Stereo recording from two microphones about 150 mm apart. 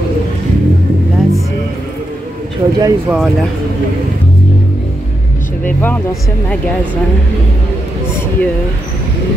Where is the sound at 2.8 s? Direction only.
25° right (ahead or behind).